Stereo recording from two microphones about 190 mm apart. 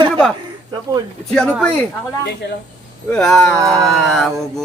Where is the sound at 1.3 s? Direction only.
5° left (ahead or behind).